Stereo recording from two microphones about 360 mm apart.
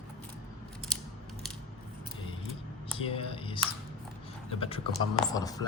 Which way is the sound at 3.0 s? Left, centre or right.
Centre.